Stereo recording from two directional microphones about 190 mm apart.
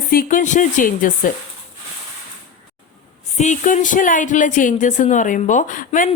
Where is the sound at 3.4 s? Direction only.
40° left (ahead or behind).